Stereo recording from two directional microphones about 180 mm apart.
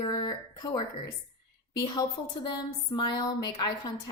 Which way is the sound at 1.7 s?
20° left (ahead or behind).